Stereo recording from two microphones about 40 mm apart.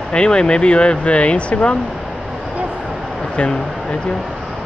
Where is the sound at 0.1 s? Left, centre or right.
Left.